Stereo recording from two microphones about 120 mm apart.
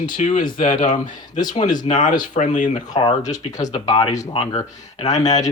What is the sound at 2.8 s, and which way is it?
Speech, 35° left (ahead or behind).